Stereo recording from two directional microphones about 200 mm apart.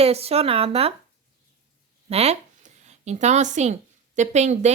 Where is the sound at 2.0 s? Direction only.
30° right (ahead or behind).